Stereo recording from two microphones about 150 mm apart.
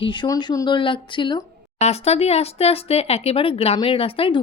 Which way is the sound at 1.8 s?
45° left (ahead or behind).